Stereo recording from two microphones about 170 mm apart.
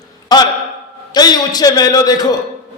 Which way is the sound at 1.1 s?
25° left (ahead or behind).